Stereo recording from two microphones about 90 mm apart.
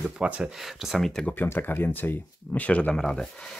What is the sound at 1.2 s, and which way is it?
Speech, 25° left (ahead or behind).